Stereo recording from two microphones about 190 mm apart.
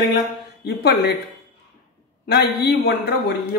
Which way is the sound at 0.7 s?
55° left (ahead or behind).